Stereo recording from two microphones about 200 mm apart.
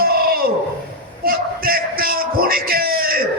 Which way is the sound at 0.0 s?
50° right (ahead or behind).